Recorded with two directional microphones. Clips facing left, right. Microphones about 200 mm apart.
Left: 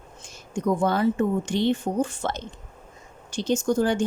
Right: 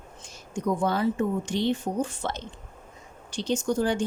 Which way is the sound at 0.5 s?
50° left (ahead or behind).